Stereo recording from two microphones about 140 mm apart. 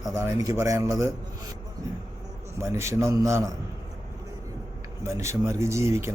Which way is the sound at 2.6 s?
20° right (ahead or behind).